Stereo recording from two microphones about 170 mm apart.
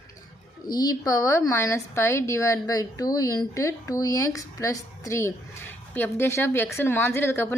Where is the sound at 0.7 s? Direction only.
25° left (ahead or behind).